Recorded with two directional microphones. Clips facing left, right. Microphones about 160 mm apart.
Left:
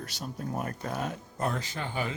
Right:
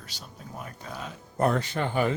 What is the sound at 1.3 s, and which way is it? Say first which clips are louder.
Speech: right 9 dB; 65° right (ahead or behind).